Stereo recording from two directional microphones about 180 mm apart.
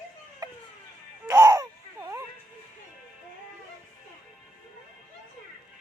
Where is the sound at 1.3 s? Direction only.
15° right (ahead or behind).